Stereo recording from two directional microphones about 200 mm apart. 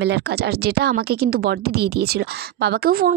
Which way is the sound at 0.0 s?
55° right (ahead or behind).